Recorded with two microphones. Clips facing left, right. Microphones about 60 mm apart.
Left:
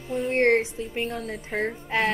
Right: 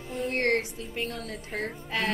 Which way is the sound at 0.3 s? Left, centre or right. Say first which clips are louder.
Left 6 dB; left.